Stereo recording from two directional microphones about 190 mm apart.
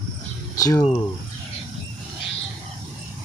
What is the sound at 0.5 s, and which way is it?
Cricket, 20° left (ahead or behind).